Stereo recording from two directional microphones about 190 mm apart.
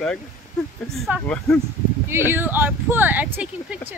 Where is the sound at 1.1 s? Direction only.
10° right (ahead or behind).